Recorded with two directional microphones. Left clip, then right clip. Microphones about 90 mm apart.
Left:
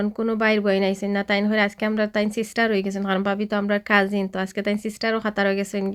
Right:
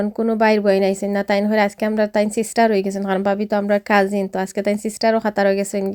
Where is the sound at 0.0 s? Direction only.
60° right (ahead or behind).